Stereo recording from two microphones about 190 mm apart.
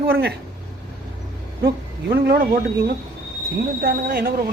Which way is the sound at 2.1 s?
60° right (ahead or behind).